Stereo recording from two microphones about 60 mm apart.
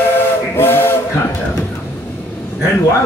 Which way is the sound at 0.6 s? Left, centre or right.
Left.